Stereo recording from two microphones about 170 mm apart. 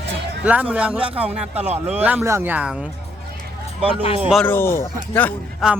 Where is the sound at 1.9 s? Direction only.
10° right (ahead or behind).